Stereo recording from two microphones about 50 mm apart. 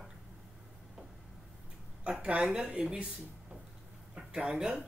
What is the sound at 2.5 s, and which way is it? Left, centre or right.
Speech, right.